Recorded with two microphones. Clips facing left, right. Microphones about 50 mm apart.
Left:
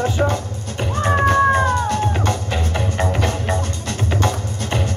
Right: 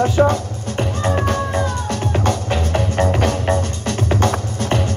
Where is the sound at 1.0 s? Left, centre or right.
Left.